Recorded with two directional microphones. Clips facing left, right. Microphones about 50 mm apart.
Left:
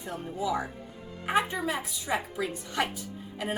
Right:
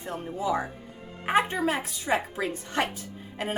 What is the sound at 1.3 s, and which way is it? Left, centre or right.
A woman's voice, right.